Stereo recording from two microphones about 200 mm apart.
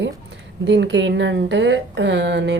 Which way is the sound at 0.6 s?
60° right (ahead or behind).